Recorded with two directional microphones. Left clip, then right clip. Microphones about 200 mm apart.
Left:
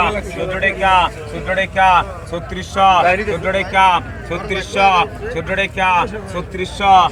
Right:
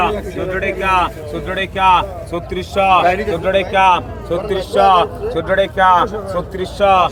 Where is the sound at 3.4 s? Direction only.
30° left (ahead or behind).